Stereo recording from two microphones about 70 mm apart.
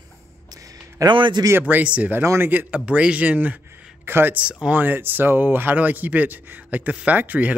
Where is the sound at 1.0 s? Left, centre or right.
Right.